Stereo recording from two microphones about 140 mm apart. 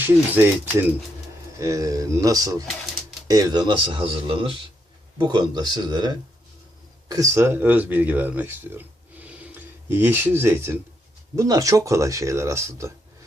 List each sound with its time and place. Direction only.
0.0 s speech: 15° right (ahead or behind); by 4.5 s 40° right (ahead or behind)
5.1 s speech: 30° right (ahead or behind)